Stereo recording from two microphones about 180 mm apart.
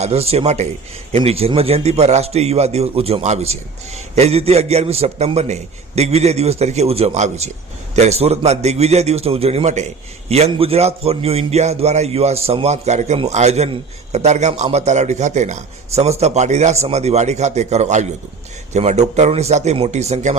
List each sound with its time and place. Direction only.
0.0 s a man's voice: 35° right (ahead or behind)